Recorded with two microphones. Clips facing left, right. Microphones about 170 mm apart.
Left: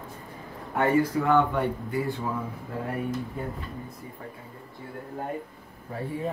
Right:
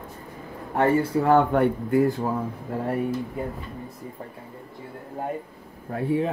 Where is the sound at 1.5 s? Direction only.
55° right (ahead or behind).